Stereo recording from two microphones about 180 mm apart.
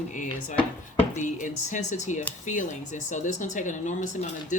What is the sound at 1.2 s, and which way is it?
Speech, 45° left (ahead or behind).